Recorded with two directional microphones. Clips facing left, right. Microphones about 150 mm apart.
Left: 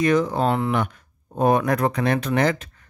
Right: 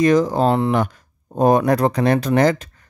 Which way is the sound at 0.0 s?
35° right (ahead or behind).